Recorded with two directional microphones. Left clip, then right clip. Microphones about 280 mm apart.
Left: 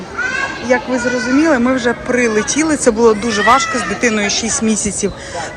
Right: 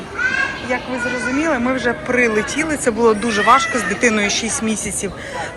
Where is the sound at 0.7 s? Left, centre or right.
Left.